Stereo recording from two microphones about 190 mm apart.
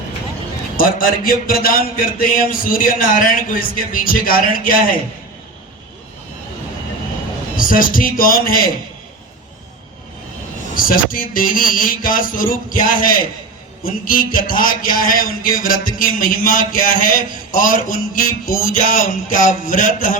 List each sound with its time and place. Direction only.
0.8 s a man's voice: 50° left (ahead or behind)
7.5 s a man's voice: 45° left (ahead or behind)
10.8 s a man's voice: 50° left (ahead or behind)